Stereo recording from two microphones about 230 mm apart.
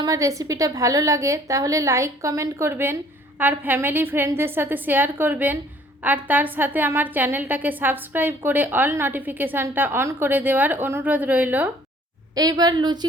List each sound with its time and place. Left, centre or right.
0.0 s a woman's voice: centre